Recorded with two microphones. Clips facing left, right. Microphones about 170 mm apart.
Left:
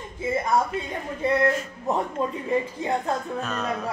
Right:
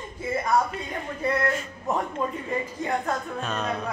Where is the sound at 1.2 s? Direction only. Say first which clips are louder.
Left 4 dB; 25° left (ahead or behind).